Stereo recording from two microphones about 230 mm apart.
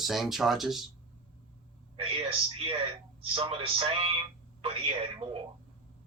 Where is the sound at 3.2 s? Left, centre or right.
Right.